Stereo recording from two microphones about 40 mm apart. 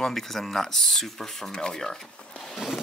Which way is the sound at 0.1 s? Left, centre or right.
Centre.